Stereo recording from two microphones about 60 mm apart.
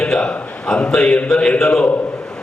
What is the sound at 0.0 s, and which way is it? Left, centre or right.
A man's voice, centre.